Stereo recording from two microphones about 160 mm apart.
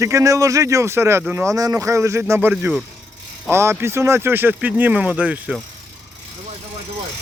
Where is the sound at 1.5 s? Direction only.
20° right (ahead or behind).